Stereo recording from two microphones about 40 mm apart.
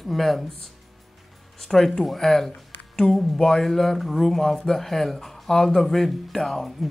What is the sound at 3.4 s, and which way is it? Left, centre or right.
Speech, centre.